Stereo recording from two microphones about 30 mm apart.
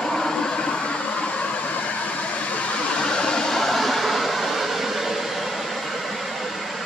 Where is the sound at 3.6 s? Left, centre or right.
Centre.